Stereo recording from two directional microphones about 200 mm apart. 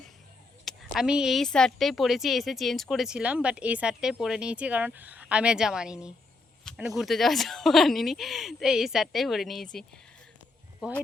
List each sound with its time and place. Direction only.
0.6 s a woman's voice: centre (ahead or behind)
10.8 s a woman's voice: 5° right (ahead or behind)